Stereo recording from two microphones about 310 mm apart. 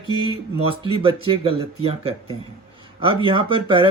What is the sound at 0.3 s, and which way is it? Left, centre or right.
Speech, centre.